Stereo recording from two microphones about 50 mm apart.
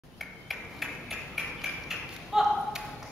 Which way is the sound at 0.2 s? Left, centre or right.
Centre.